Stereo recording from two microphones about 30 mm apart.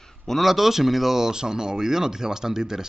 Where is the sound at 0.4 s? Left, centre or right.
Centre.